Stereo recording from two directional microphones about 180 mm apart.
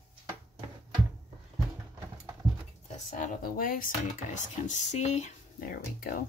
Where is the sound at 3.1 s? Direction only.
50° left (ahead or behind).